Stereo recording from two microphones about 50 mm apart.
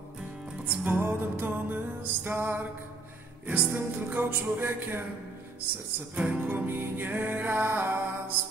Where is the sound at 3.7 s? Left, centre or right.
Right.